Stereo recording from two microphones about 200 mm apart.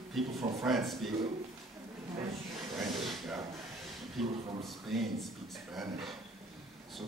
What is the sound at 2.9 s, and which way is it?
Snake, centre (ahead or behind).